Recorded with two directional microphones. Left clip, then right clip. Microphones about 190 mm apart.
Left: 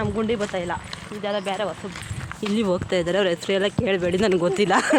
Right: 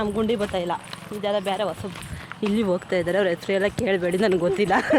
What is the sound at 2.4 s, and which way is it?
Speech, 10° left (ahead or behind).